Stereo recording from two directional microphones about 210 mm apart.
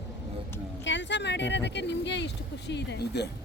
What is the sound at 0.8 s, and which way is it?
Speech, 60° left (ahead or behind).